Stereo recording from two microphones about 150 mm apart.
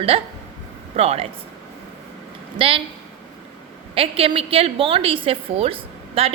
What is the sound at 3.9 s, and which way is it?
A woman's voice, 40° right (ahead or behind).